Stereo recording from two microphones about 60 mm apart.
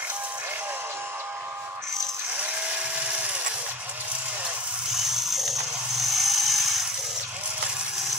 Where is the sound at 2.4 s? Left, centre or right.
Right.